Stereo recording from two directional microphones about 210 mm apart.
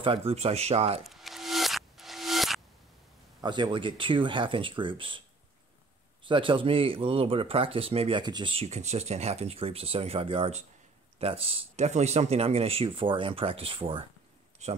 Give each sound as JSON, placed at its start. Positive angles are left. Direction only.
{"t": 0.0, "sound": "speech", "side_deg": -25}
{"t": 1.0, "sound": "a sound", "side_deg": 0}
{"t": 3.3, "sound": "speech", "side_deg": -20}
{"t": 6.2, "sound": "speech", "side_deg": -25}